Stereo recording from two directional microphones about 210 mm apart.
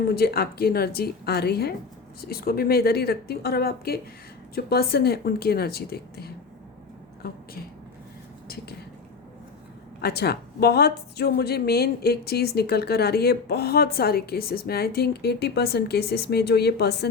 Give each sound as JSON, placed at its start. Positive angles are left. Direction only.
{"t": 0.1, "sound": "a woman's voice", "side_deg": 45}
{"t": 10.0, "sound": "a woman's voice", "side_deg": 50}